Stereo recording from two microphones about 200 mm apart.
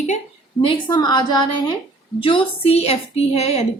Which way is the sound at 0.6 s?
20° left (ahead or behind).